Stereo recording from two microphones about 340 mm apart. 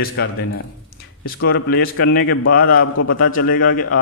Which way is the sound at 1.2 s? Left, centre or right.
Left.